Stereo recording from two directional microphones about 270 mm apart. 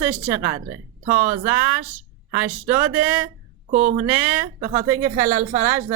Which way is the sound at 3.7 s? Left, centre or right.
Right.